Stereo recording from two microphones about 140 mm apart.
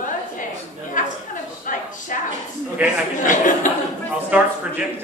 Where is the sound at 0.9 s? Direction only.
70° left (ahead or behind).